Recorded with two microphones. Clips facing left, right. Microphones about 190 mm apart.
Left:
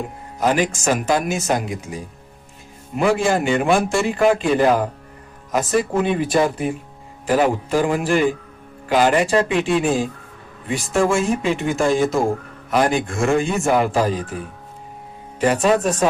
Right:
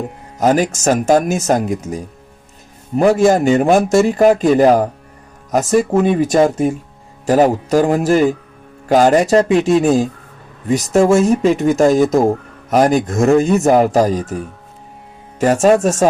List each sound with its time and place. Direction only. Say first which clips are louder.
0.3 s a man's voice: right 5 dB; 45° right (ahead or behind)